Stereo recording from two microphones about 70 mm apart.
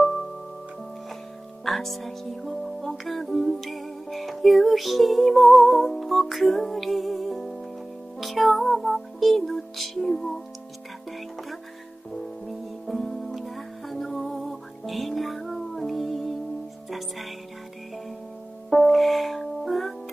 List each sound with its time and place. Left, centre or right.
1.6 s speech: centre
8.2 s music: centre
12.4 s music: centre
18.7 s music: centre